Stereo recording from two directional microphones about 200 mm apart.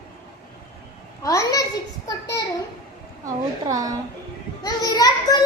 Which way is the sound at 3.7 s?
15° right (ahead or behind).